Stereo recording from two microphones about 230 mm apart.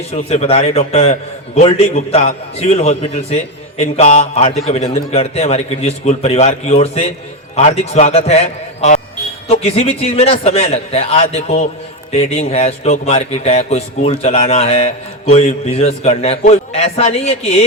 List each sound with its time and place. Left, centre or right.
0.3 s a man's voice: left